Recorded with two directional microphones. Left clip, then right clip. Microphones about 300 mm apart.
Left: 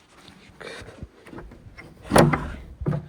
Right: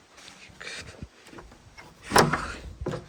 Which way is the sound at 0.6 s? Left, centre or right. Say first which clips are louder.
Left 1 dB; centre.